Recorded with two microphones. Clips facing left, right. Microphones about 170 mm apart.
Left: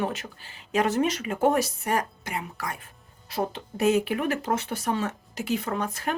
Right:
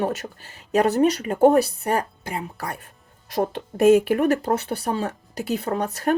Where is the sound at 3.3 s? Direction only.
50° right (ahead or behind).